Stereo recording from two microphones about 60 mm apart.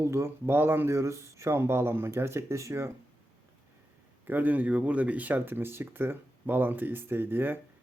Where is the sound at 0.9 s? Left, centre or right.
Right.